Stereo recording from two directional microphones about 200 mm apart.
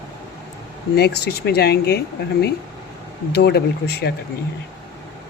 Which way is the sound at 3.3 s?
55° left (ahead or behind).